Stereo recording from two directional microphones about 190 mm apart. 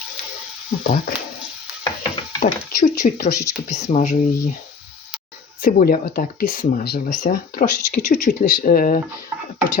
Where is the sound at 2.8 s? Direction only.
40° left (ahead or behind).